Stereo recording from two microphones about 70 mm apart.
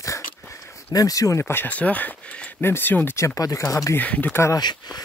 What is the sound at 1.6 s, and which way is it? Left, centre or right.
Speech, left.